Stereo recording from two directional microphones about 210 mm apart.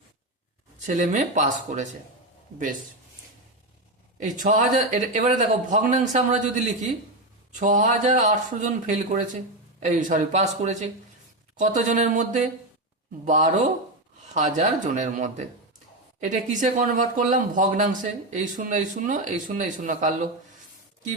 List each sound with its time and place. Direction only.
0.9 s speech: 35° right (ahead or behind)
4.2 s speech: 40° right (ahead or behind)